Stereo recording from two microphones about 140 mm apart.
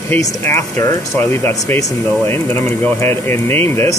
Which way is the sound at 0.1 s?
20° left (ahead or behind).